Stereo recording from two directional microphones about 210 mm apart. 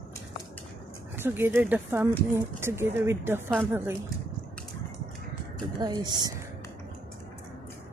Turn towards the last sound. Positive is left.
turn(degrees=-20)  # may be behind; listen again after turning